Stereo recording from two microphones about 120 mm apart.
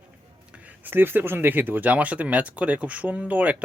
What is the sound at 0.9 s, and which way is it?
Speech, 15° right (ahead or behind).